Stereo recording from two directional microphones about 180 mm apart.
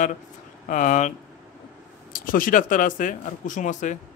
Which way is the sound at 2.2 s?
50° left (ahead or behind).